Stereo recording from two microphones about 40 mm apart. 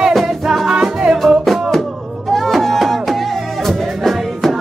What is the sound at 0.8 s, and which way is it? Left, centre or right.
Music, right.